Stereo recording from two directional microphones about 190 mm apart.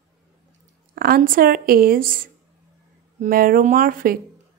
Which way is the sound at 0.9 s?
50° right (ahead or behind).